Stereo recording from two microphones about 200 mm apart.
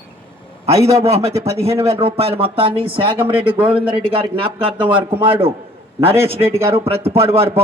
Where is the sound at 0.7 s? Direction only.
15° right (ahead or behind).